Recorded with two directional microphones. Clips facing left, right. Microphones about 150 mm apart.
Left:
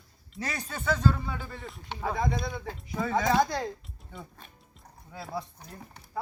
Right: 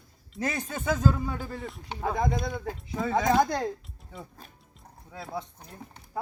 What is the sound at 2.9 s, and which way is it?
Speech, centre (ahead or behind).